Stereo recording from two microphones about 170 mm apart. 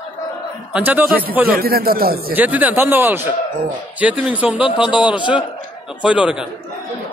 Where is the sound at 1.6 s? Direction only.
60° right (ahead or behind).